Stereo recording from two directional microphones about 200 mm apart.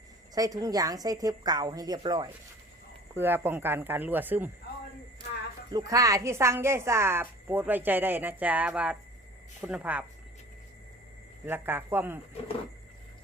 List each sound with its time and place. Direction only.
0.3 s a woman's voice: 15° right (ahead or behind)
3.2 s a woman's voice: 10° right (ahead or behind)
5.7 s a woman's voice: 15° right (ahead or behind)
11.4 s a woman's voice: 10° right (ahead or behind)